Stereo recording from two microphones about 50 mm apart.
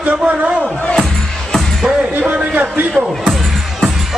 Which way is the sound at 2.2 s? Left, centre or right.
Right.